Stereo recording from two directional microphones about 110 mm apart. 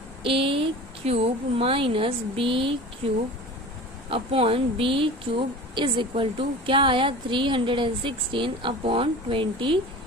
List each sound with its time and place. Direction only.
0.2 s a woman's voice: 55° right (ahead or behind)
4.1 s a woman's voice: 55° right (ahead or behind)